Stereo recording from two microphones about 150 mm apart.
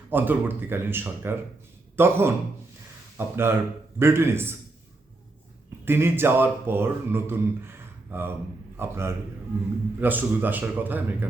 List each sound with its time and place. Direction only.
0.1 s speech: 15° right (ahead or behind)
5.8 s speech: 15° right (ahead or behind)